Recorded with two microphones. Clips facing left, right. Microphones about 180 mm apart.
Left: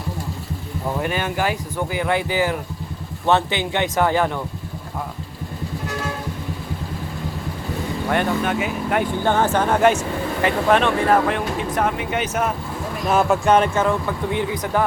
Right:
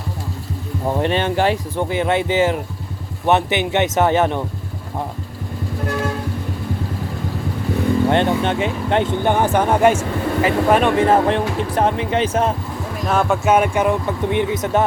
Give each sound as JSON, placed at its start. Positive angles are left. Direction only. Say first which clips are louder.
{"t": 0.9, "sound": "speech", "louder": "right 5 dB", "side_deg": -30}
{"t": 8.1, "sound": "speech", "louder": "right 3 dB", "side_deg": -25}
{"t": 11.0, "sound": "speech", "louder": "right 3 dB", "side_deg": -30}
{"t": 13.1, "sound": "speech", "louder": "even", "side_deg": 5}